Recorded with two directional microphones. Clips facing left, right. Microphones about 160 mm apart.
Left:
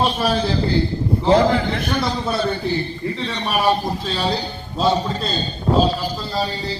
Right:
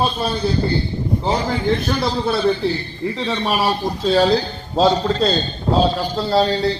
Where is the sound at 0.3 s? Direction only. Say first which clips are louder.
Even; 90° left; by 2.0 s 65° left (ahead or behind).